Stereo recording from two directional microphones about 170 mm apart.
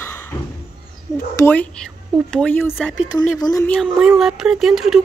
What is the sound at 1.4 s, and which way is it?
Speech, 10° left (ahead or behind).